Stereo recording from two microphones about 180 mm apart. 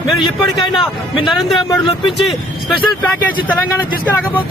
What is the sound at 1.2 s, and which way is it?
Speech, centre (ahead or behind).